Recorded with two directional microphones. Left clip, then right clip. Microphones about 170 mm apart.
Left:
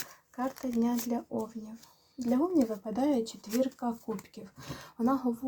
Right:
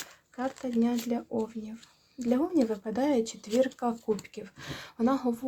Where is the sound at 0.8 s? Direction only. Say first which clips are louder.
Right 2 dB; 25° right (ahead or behind).